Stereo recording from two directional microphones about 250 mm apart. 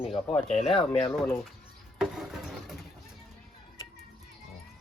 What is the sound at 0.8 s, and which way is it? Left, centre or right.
Speech, centre.